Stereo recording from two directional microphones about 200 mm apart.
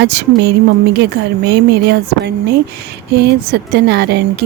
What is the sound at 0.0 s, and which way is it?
Speech, 55° right (ahead or behind).